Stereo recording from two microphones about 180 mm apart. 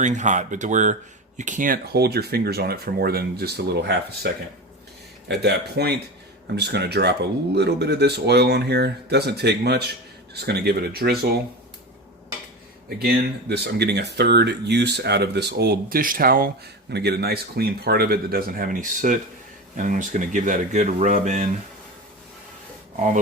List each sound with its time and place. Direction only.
0.0 s speech: 40° right (ahead or behind); by 4.3 s 65° right (ahead or behind)
5.4 s speech: 65° right (ahead or behind)
13.0 s speech: 65° right (ahead or behind)
16.9 s speech: 65° right (ahead or behind); by 21.5 s 45° right (ahead or behind)